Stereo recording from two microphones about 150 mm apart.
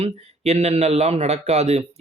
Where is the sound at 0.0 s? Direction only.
45° right (ahead or behind).